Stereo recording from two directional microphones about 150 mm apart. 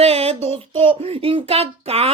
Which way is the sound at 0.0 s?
45° right (ahead or behind).